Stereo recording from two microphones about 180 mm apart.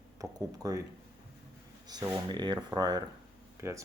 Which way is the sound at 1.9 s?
20° right (ahead or behind).